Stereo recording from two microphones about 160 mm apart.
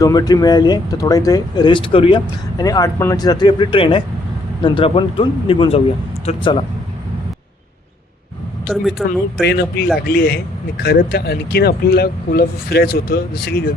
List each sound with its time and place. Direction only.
0.0 s speech: 25° left (ahead or behind)
8.6 s speech: centre (ahead or behind)
9.4 s speech: 90° left
10.1 s speech: 80° left